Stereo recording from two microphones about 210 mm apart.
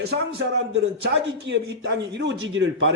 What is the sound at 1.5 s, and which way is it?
Speech, 55° right (ahead or behind).